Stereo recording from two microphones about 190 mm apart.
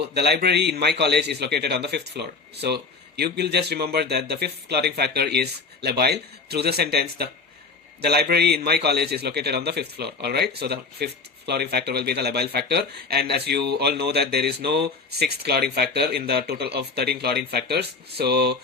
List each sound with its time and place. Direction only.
0.2 s a man's voice: 60° right (ahead or behind)